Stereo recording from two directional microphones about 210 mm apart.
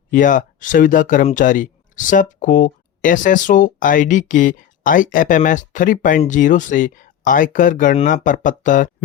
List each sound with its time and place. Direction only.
0.1 s speech: 40° left (ahead or behind)